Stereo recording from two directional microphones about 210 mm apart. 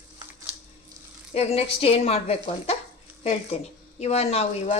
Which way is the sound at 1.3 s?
30° left (ahead or behind).